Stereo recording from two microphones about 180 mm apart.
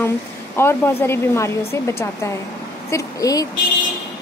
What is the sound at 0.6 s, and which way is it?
A woman's voice, 15° left (ahead or behind).